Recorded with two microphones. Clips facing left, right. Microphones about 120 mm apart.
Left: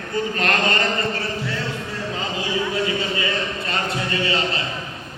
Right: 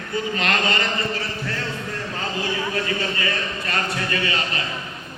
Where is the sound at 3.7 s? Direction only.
25° left (ahead or behind).